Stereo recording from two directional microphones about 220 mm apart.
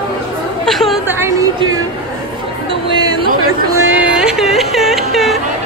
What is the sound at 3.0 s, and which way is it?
Chatter, 20° right (ahead or behind).